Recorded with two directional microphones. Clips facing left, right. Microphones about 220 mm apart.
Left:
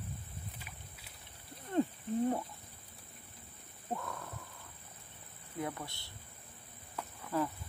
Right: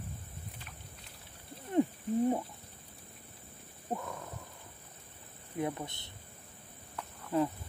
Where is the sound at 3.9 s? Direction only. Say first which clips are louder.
Right 2 dB; 20° right (ahead or behind).